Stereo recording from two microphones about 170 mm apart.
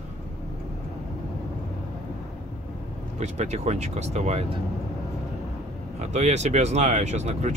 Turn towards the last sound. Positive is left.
turn(degrees=-40)  # may be behind; listen again after turning